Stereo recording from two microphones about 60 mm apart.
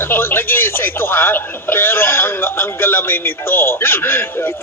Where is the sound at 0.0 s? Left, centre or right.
Left.